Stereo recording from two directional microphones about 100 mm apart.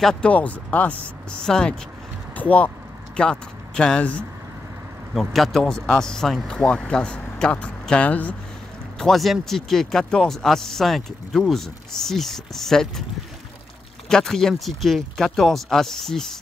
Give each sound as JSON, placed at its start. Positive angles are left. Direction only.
{"t": 0.0, "sound": "speech", "side_deg": 10}
{"t": 5.3, "sound": "speech", "side_deg": 5}
{"t": 8.9, "sound": "speech", "side_deg": 5}
{"t": 14.0, "sound": "speech", "side_deg": 5}